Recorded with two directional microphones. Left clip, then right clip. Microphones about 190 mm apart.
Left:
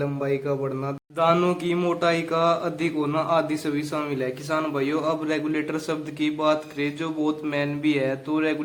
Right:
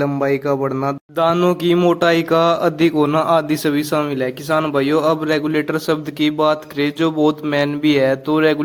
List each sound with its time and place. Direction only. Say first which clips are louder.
0.0 s speech: right 8 dB; 35° right (ahead or behind)